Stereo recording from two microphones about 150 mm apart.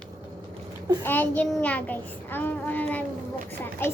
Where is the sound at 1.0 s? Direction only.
15° left (ahead or behind).